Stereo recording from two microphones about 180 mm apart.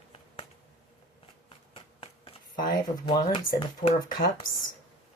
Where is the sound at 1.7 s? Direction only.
30° left (ahead or behind).